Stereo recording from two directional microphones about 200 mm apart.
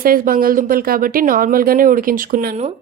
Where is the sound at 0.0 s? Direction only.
45° right (ahead or behind).